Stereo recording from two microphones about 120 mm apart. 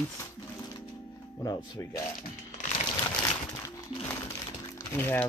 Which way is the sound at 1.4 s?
35° left (ahead or behind).